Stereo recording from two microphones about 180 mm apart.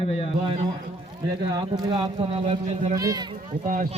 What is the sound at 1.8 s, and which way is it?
Speech, 30° right (ahead or behind).